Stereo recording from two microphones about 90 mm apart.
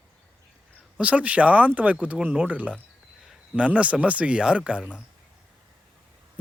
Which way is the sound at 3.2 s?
5° right (ahead or behind).